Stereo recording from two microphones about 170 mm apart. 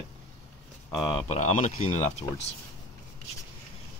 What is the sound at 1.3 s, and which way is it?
Speech, 45° left (ahead or behind).